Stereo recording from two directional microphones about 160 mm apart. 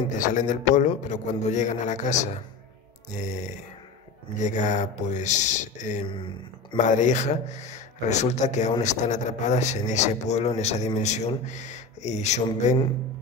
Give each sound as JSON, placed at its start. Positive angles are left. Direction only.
{"t": 0.3, "sound": "a man's voice", "side_deg": 55}
{"t": 6.0, "sound": "speech", "side_deg": 30}
{"t": 6.8, "sound": "a man's voice", "side_deg": 50}